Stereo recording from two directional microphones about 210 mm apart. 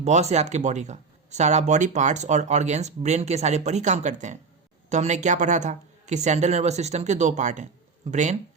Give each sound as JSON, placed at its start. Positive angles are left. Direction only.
{"t": 0.0, "sound": "speech", "side_deg": -30}